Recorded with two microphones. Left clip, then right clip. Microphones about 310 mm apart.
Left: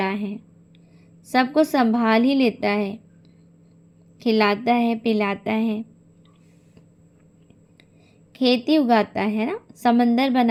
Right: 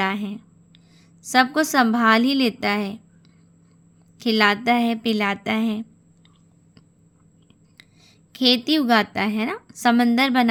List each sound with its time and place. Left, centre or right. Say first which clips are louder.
0.0 s a woman's voice: right 1 dB; centre
4.2 s a woman's voice: right 1 dB; centre
8.3 s a woman's voice: even; right